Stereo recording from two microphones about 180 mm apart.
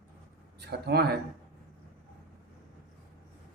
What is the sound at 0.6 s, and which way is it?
Speech, 65° right (ahead or behind).